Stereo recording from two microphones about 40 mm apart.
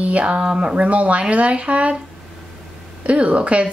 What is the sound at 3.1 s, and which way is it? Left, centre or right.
Speech, right.